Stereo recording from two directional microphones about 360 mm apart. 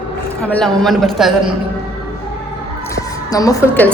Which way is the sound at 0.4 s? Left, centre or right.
Centre.